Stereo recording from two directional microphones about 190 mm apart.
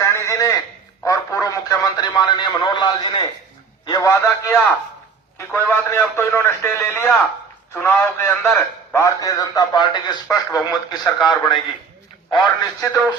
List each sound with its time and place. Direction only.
0.0 s a sound: 15° left (ahead or behind)
1.0 s radio: 15° left (ahead or behind)
3.8 s a man's voice: 15° left (ahead or behind)
12.8 s speech: 15° left (ahead or behind)